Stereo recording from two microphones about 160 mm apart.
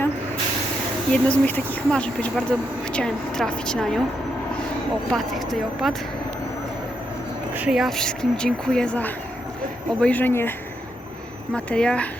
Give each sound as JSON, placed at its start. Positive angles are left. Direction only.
{"t": 1.1, "sound": "speech", "side_deg": 10}
{"t": 5.1, "sound": "speech", "side_deg": 0}
{"t": 7.5, "sound": "speech", "side_deg": -5}
{"t": 11.5, "sound": "speech", "side_deg": 5}